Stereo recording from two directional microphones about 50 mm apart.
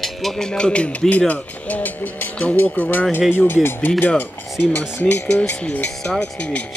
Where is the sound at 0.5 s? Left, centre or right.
Centre; by 3.9 s left.